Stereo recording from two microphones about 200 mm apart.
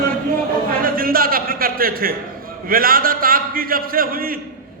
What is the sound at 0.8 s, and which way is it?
A man's voice, 45° right (ahead or behind).